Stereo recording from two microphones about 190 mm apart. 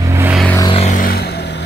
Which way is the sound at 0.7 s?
40° left (ahead or behind).